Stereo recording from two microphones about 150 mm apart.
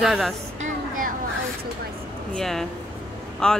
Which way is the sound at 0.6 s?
65° right (ahead or behind).